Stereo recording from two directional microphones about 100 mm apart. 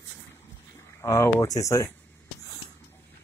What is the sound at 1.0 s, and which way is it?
Speech, 30° left (ahead or behind).